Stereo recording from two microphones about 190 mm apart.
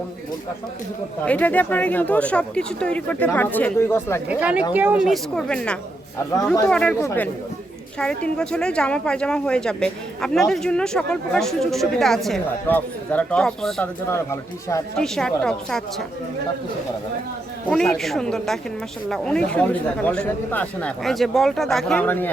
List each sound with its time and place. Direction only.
1.2 s speech: 10° left (ahead or behind)
4.3 s a woman's voice: 5° right (ahead or behind)
5.1 s a woman's voice: 5° left (ahead or behind)
14.1 s speech: 15° left (ahead or behind)
14.9 s a woman's voice: 5° left (ahead or behind)
17.7 s a woman's voice: centre (ahead or behind)